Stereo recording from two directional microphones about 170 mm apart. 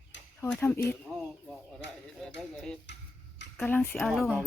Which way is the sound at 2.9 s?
90° left.